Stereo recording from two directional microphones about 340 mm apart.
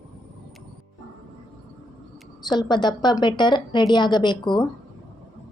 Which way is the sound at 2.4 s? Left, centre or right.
Centre.